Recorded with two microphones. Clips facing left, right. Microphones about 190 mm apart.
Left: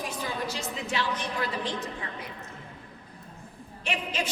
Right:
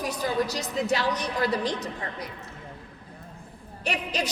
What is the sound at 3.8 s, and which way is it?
Speech, 40° right (ahead or behind).